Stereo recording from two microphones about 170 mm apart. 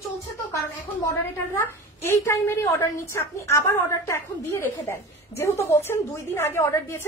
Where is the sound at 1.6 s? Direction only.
15° left (ahead or behind).